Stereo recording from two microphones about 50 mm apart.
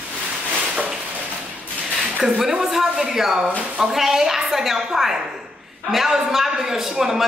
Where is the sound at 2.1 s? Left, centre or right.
Centre.